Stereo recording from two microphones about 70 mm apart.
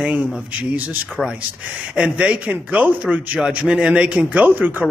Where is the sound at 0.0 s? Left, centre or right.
Centre.